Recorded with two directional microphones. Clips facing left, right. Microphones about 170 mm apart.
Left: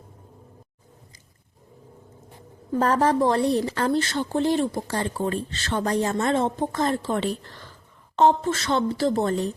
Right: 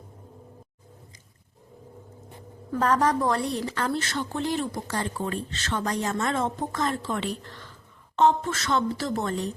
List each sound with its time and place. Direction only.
2.7 s a woman's voice: 30° left (ahead or behind)